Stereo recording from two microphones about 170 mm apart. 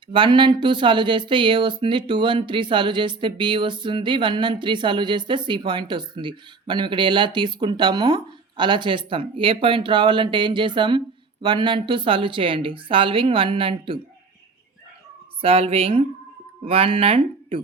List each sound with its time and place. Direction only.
0.1 s speech: 25° right (ahead or behind)
15.4 s speech: 35° right (ahead or behind)